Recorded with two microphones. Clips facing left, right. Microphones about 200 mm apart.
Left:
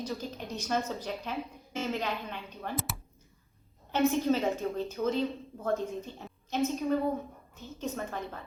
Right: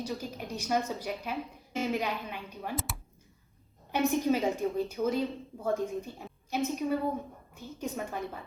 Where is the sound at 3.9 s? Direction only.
15° right (ahead or behind).